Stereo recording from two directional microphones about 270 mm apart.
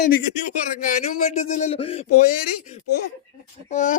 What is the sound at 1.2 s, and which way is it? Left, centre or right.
Speech, left.